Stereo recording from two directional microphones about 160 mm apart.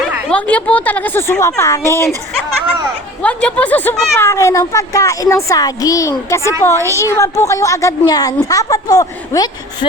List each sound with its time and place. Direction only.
0.3 s speech: 10° left (ahead or behind)
3.2 s a woman's voice: 10° left (ahead or behind)